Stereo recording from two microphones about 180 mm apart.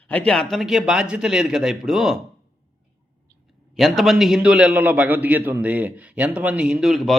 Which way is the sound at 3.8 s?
Centre (ahead or behind).